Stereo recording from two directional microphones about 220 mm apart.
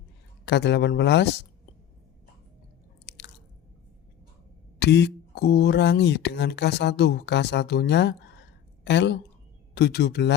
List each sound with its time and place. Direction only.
0.4 s speech: 50° left (ahead or behind)
3.1 s chewing: 50° left (ahead or behind)
4.8 s a woman's voice: 50° left (ahead or behind)